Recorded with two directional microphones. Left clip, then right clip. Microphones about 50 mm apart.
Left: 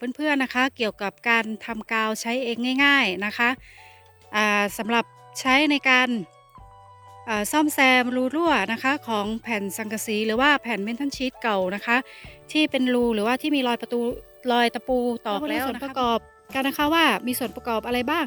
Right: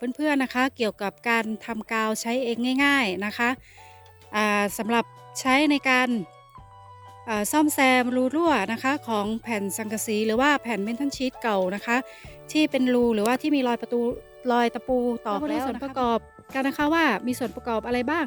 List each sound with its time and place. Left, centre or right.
0.0 s speech: right
7.3 s speech: right
14.4 s speech: right; by 16.0 s centre
16.0 s speech: right